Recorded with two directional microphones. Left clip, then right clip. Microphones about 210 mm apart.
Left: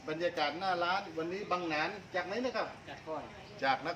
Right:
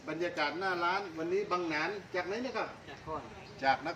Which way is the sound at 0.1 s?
15° left (ahead or behind).